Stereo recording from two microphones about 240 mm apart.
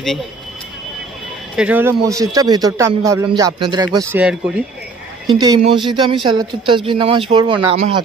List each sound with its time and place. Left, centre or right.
1.6 s a man's voice: centre
5.3 s a man's voice: centre